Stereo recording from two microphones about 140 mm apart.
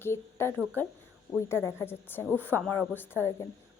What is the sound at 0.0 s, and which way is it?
A woman's voice, 15° left (ahead or behind).